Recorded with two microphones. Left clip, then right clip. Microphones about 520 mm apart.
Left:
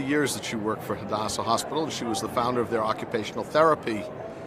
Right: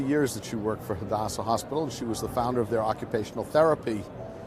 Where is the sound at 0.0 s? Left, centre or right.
Right.